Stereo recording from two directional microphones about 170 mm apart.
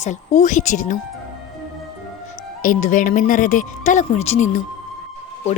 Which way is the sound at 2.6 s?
50° left (ahead or behind).